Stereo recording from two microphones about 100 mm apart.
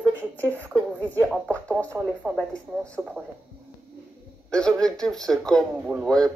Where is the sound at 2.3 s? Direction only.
10° left (ahead or behind).